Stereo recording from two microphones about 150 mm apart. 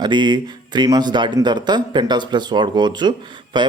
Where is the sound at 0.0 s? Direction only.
30° right (ahead or behind).